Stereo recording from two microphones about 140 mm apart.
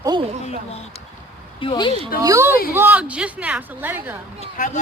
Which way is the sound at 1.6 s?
35° left (ahead or behind).